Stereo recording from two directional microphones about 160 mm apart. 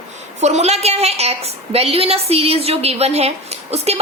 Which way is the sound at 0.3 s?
45° right (ahead or behind).